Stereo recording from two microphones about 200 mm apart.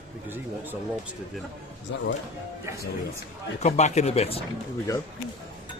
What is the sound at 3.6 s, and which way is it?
Speech, 35° left (ahead or behind).